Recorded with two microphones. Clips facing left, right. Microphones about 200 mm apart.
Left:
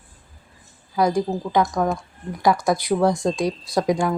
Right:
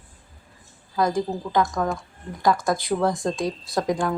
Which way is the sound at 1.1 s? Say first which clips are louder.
Left 2 dB; 15° left (ahead or behind).